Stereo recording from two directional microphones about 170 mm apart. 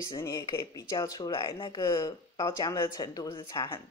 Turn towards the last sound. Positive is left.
turn(degrees=25)  # may be behind; listen again after turning